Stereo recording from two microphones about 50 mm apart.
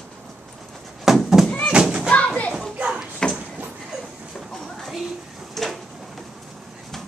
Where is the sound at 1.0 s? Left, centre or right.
Centre.